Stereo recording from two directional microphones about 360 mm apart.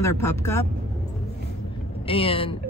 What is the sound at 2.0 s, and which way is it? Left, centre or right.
Speech, centre.